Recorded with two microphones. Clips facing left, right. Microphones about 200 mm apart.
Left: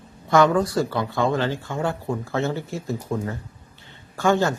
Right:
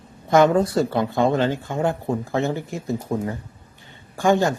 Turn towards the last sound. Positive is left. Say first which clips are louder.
# right 2 dB
turn(degrees=-15)  # may be behind; listen again after turning